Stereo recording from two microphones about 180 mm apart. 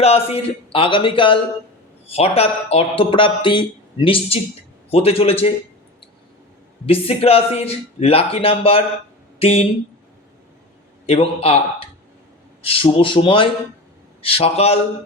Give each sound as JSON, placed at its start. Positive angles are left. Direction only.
{"t": 0.0, "sound": "speech", "side_deg": 35}
{"t": 6.8, "sound": "speech", "side_deg": 30}
{"t": 11.0, "sound": "speech", "side_deg": 35}